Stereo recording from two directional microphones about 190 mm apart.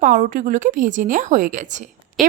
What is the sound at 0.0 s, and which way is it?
A woman's voice, 45° right (ahead or behind).